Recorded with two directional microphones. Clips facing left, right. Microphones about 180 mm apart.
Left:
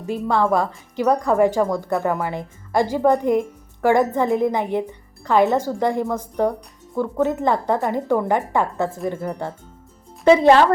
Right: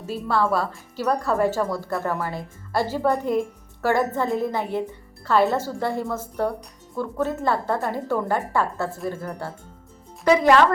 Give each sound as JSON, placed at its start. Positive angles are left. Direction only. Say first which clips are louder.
{"t": 0.0, "sound": "speech", "louder": "left 3 dB", "side_deg": 15}